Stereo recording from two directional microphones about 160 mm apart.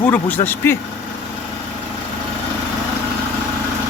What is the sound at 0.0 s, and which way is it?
Speech, 10° left (ahead or behind).